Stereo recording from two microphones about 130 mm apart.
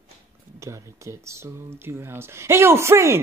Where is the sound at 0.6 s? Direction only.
20° right (ahead or behind).